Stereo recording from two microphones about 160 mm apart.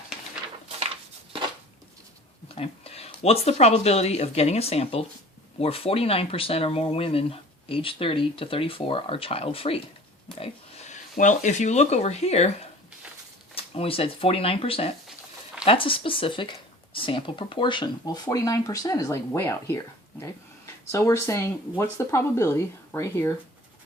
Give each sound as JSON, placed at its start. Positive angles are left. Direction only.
{"t": 2.6, "sound": "speech", "side_deg": 40}
{"t": 13.6, "sound": "speech", "side_deg": 35}